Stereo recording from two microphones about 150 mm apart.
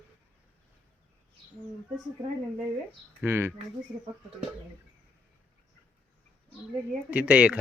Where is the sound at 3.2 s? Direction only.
15° right (ahead or behind).